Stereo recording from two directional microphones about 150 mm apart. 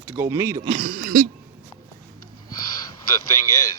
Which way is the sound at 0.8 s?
60° right (ahead or behind).